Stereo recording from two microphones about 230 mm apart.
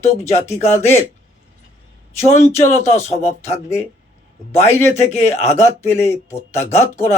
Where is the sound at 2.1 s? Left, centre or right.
Left.